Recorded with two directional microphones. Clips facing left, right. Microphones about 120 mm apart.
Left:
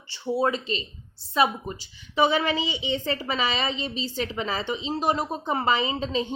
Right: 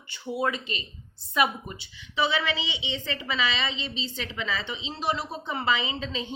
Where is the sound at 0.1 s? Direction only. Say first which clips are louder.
Left 4 dB; 30° left (ahead or behind).